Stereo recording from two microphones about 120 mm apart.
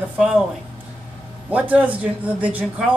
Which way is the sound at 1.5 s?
10° right (ahead or behind).